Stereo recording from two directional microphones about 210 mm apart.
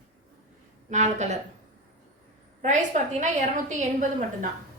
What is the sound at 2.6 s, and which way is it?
A woman's voice, 35° right (ahead or behind).